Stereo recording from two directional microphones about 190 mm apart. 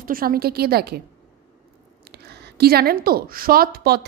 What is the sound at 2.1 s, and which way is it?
A woman's voice, 60° right (ahead or behind).